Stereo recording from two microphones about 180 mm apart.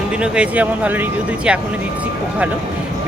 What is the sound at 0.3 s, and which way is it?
Speech, 10° right (ahead or behind).